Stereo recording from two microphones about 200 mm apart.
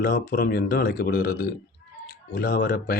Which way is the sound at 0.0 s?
50° left (ahead or behind).